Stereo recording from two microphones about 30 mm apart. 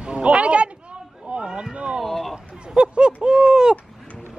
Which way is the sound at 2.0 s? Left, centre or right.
Centre.